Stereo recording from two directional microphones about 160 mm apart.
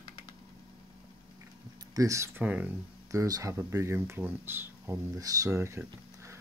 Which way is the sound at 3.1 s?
20° right (ahead or behind).